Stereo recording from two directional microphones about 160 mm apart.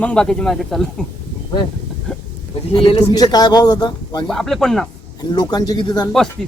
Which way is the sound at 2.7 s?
30° left (ahead or behind).